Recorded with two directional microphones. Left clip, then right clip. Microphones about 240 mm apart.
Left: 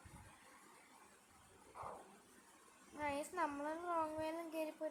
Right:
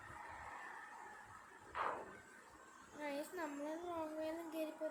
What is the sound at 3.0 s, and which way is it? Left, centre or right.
Child singing, centre.